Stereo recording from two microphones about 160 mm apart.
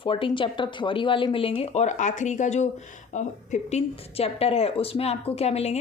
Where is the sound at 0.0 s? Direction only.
35° left (ahead or behind).